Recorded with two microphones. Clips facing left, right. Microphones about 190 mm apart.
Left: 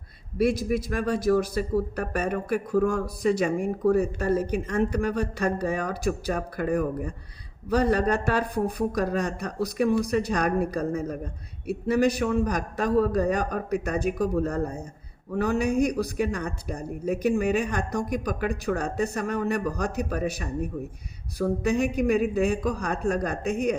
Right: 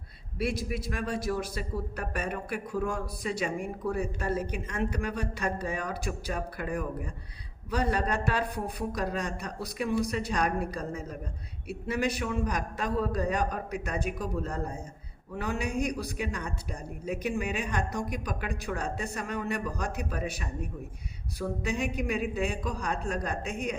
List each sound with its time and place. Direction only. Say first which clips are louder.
0.3 s a man's voice: left 8 dB; 40° left (ahead or behind)